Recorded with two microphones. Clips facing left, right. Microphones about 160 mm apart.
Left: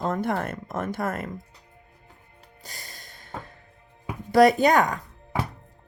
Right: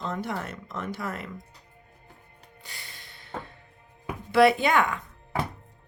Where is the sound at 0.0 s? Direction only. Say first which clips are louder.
Left 6 dB; 50° left (ahead or behind).